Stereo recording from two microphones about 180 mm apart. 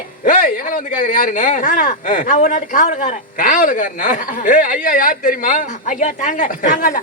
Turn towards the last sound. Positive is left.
turn(degrees=45)  # may be behind; listen again after turning